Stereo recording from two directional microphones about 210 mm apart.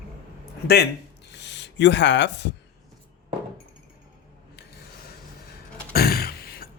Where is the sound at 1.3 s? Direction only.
55° left (ahead or behind).